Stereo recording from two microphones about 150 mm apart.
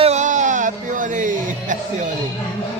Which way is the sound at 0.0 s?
50° right (ahead or behind).